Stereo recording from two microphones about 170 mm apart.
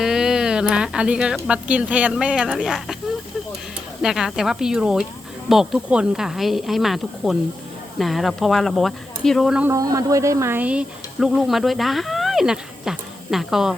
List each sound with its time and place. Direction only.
0.0 s speech: 5° right (ahead or behind)
4.0 s speech: 5° right (ahead or behind)
9.6 s speech: 20° right (ahead or behind); by 13.7 s 5° right (ahead or behind)